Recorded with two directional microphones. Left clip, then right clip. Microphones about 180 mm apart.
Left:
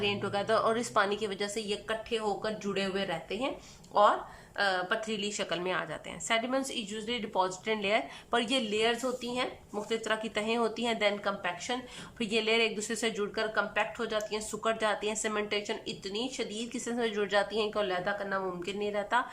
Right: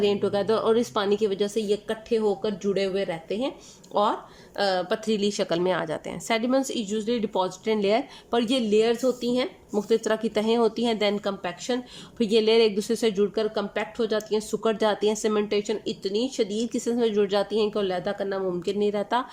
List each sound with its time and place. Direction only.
0.0 s a woman's voice: 20° right (ahead or behind)